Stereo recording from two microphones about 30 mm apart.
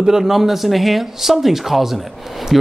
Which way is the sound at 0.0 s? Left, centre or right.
Centre.